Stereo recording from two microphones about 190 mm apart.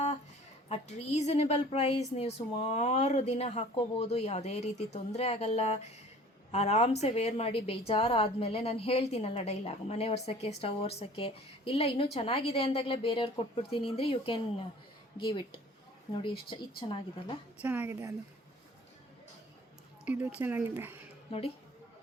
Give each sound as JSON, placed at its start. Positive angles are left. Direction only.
{"t": 0.7, "sound": "a woman's voice", "side_deg": 35}
{"t": 17.6, "sound": "speech", "side_deg": -10}
{"t": 20.1, "sound": "speech", "side_deg": -10}
{"t": 21.2, "sound": "a woman's voice", "side_deg": 30}